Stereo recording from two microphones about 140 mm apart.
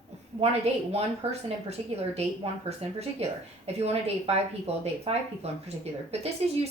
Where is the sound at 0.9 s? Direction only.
50° right (ahead or behind).